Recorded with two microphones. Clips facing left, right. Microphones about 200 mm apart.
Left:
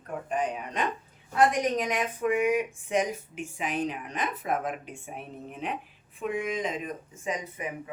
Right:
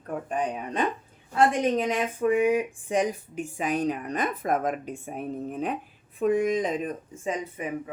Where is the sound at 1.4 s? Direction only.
30° right (ahead or behind).